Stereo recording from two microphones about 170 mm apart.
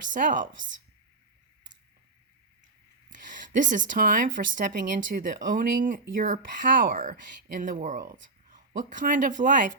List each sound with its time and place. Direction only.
0.1 s speech: 50° right (ahead or behind)
3.1 s speech: 50° right (ahead or behind)